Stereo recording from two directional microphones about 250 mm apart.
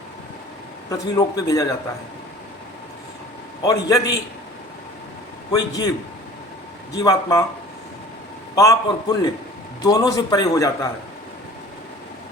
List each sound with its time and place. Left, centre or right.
0.9 s a man's voice: centre
3.7 s a man's voice: centre
5.5 s a man's voice: centre
7.0 s a man's voice: centre
8.5 s a man's voice: centre